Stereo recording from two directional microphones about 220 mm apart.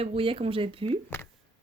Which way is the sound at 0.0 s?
25° right (ahead or behind).